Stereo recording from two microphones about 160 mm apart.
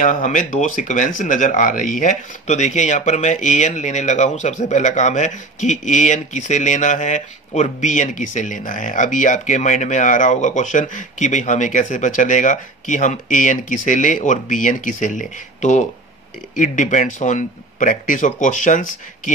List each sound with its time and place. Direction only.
0.0 s speech: 50° left (ahead or behind)